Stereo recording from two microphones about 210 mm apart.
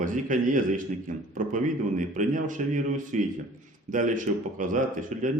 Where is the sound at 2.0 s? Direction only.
40° right (ahead or behind).